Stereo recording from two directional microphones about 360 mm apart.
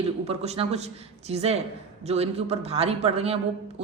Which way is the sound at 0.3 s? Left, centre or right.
Centre.